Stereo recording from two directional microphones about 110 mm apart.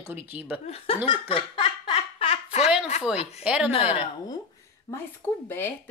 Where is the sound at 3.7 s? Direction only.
60° left (ahead or behind).